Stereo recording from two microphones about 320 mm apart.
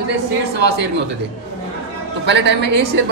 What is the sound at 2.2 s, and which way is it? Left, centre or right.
Speech, right.